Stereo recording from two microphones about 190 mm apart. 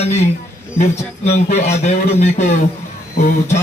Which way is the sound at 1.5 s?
35° left (ahead or behind).